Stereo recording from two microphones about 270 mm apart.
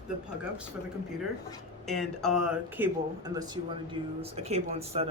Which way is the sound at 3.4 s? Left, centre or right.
Centre.